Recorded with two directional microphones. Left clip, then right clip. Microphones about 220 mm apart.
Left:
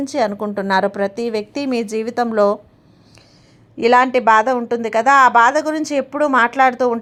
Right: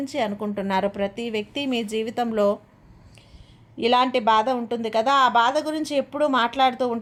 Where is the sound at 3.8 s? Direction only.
20° left (ahead or behind).